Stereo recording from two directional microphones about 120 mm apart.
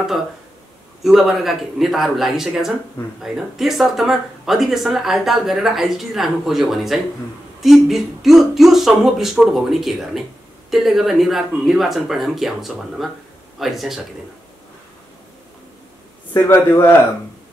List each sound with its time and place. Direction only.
1.0 s speech: centre (ahead or behind)
16.3 s a man's voice: 25° left (ahead or behind)